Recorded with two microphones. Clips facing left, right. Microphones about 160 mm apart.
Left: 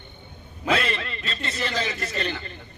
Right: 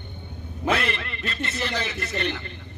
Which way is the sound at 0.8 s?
65° right (ahead or behind).